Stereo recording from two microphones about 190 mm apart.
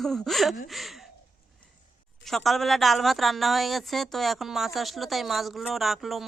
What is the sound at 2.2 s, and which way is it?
Speech, centre (ahead or behind).